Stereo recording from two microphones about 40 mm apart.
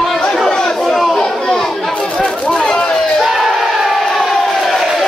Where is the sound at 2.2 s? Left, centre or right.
Centre.